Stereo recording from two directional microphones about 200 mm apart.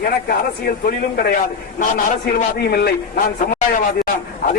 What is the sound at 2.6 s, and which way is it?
Speech, 55° left (ahead or behind).